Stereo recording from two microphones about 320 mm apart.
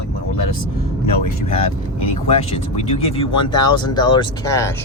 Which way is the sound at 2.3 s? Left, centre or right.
Centre.